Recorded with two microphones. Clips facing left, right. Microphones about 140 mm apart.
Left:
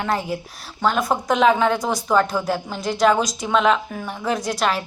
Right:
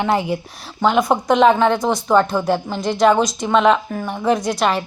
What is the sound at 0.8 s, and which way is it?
Speech, 20° right (ahead or behind).